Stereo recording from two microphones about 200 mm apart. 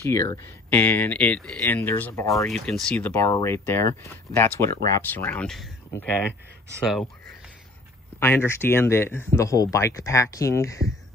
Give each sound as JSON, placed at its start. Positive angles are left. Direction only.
{"t": 0.0, "sound": "speech", "side_deg": 15}
{"t": 2.4, "sound": "speech", "side_deg": 5}
{"t": 8.2, "sound": "speech", "side_deg": 10}